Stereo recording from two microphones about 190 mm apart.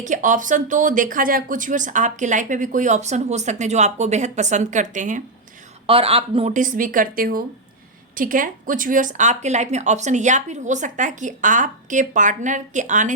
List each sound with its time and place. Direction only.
0.0 s speech: 40° right (ahead or behind)
5.8 s speech: 30° right (ahead or behind)